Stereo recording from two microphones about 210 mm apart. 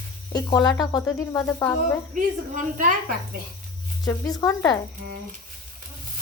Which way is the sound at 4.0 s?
15° left (ahead or behind).